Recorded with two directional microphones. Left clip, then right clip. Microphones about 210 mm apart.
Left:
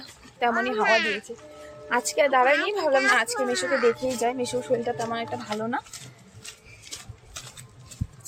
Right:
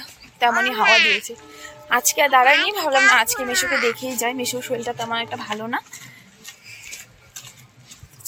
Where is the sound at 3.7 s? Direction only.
30° left (ahead or behind).